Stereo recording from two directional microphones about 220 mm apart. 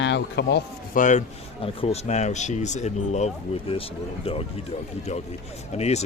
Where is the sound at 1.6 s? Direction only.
25° left (ahead or behind).